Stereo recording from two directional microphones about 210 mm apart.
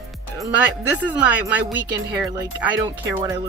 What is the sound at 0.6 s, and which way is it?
A woman's voice, 5° right (ahead or behind).